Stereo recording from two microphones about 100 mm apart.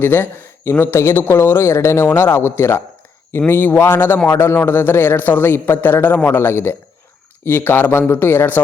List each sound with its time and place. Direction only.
0.0 s speech: 20° left (ahead or behind)